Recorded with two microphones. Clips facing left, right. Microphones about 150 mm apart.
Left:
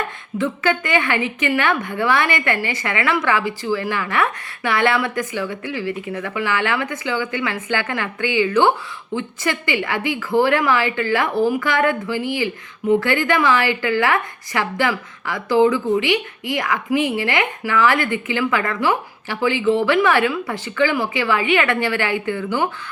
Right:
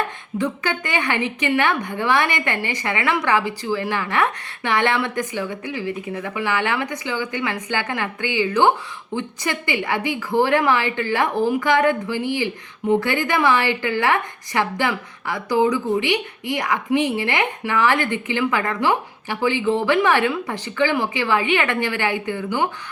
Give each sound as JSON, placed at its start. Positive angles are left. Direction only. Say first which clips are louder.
{"t": 0.3, "sound": "a woman's voice", "louder": "left 3 dB", "side_deg": -15}